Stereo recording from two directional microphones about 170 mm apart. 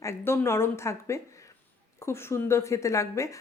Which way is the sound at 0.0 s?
15° left (ahead or behind).